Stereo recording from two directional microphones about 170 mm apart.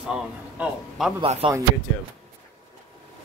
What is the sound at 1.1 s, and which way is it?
Speech, 30° right (ahead or behind).